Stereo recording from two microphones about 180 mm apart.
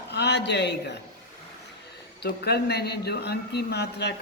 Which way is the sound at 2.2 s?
65° left (ahead or behind).